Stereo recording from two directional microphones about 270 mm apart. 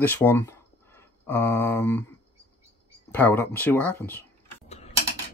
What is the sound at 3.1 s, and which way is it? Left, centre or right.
Speech, centre.